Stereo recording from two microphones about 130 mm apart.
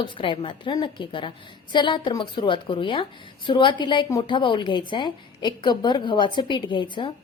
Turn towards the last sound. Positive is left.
turn(degrees=40)  # may be behind; listen again after turning